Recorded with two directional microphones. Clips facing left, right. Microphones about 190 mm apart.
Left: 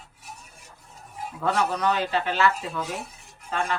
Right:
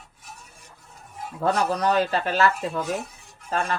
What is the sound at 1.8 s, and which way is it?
Speech, 40° right (ahead or behind).